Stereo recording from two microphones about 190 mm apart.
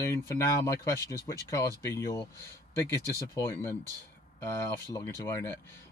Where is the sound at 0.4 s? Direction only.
15° left (ahead or behind).